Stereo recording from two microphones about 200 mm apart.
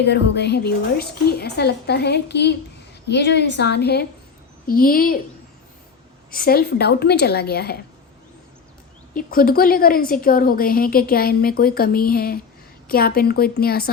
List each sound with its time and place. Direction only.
0.0 s a woman's voice: 55° left (ahead or behind)
6.3 s a woman's voice: 50° left (ahead or behind)
9.1 s a woman's voice: 45° left (ahead or behind)